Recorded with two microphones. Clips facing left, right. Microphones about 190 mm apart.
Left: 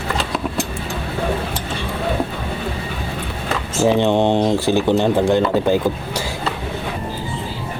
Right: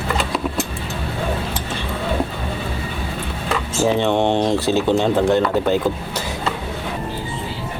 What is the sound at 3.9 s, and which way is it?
Speech, 15° left (ahead or behind).